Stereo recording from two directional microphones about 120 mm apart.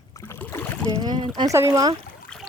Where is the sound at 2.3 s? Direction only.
10° left (ahead or behind).